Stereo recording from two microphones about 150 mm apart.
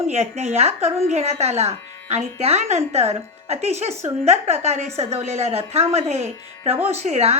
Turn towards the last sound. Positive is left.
turn(degrees=-45)  # may be behind; listen again after turning